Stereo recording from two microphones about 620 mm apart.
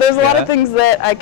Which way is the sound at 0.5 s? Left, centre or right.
Left.